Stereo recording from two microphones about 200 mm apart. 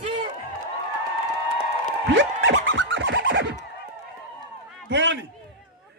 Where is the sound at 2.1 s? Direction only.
70° right (ahead or behind).